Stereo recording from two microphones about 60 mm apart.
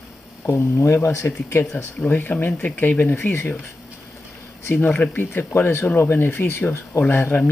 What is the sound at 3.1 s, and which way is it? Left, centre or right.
Speech, left.